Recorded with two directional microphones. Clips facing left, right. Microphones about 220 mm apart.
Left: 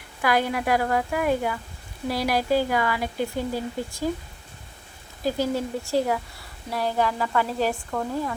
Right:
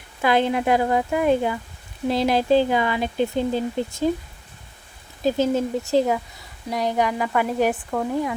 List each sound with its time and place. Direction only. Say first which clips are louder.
0.2 s speech: right 4 dB; 25° right (ahead or behind)
5.2 s speech: right 5 dB; 20° right (ahead or behind)